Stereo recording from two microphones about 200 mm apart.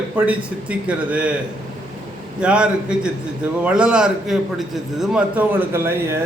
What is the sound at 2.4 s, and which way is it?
A man's voice, 5° right (ahead or behind).